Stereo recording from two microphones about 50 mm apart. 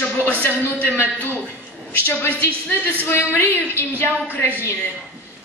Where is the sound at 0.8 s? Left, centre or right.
Left.